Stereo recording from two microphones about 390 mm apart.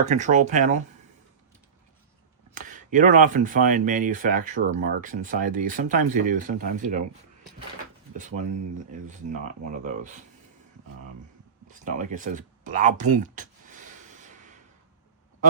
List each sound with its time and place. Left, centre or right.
0.0 s speech: centre
2.6 s speech: centre
8.1 s speech: centre
11.7 s a sound: centre